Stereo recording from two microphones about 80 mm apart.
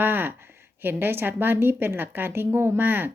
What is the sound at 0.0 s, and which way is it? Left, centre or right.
A woman's voice, right.